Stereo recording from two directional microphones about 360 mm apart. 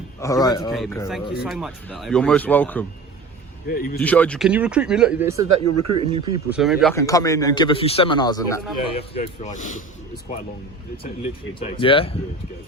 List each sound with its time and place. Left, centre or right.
0.2 s a man's voice: centre
3.7 s speech: left
4.0 s speech: centre
5.5 s speech: right
6.0 s speech: centre
6.5 s a man's voice: centre; by 9.8 s left
10.9 s a man's voice: centre